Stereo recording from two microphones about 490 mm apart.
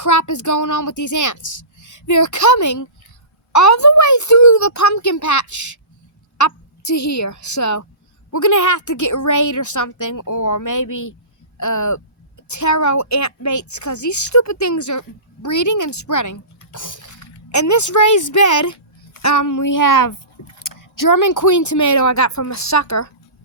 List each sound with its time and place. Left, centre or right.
0.0 s a woman's voice: left